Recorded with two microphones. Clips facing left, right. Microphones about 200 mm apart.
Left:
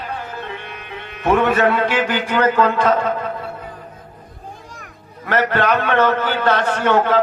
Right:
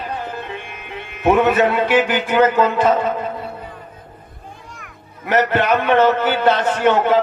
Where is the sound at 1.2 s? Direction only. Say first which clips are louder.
Right 2 dB; 10° right (ahead or behind).